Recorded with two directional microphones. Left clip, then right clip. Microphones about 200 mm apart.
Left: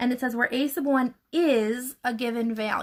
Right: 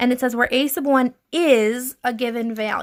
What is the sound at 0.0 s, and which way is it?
A woman's voice, 30° right (ahead or behind).